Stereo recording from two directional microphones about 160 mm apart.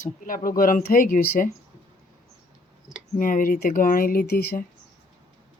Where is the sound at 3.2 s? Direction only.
60° left (ahead or behind); by 4.6 s 75° left (ahead or behind).